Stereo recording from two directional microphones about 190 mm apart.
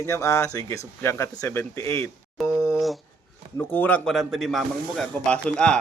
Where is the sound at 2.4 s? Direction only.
Centre (ahead or behind).